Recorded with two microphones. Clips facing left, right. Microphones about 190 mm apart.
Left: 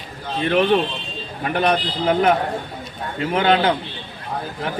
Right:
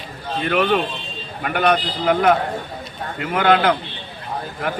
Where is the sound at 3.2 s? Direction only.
25° left (ahead or behind).